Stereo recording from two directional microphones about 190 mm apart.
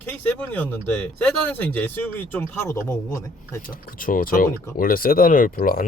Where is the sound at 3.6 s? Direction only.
45° left (ahead or behind).